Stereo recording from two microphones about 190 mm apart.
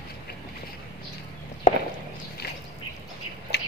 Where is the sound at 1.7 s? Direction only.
40° left (ahead or behind).